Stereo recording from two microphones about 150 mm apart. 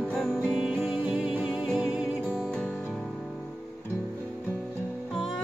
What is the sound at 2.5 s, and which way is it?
Music, 5° left (ahead or behind).